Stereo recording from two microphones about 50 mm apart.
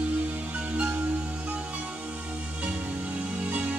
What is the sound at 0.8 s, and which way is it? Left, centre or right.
Music, right.